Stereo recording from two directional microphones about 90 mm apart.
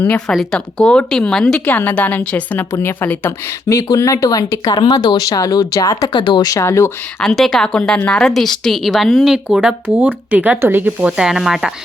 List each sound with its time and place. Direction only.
0.3 s a woman's voice: 5° left (ahead or behind)
1.6 s a woman's voice: 20° left (ahead or behind)
3.7 s speech: 35° left (ahead or behind)
4.7 s speech: 50° left (ahead or behind)
6.1 s speech: 60° left (ahead or behind)
6.5 s speech: 35° left (ahead or behind)
7.2 s a woman's voice: 5° left (ahead or behind); by 10.9 s 25° right (ahead or behind)
11.0 s a woman's voice: 5° right (ahead or behind)